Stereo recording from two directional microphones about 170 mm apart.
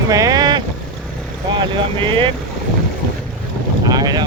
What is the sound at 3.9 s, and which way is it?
Boat, 25° right (ahead or behind).